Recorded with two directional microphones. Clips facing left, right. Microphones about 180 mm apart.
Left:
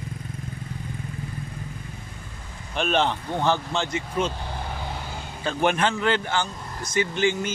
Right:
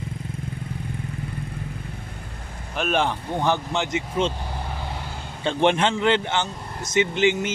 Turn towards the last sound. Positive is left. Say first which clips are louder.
# right 3 dB
turn(degrees=-20)  # may be behind; listen again after turning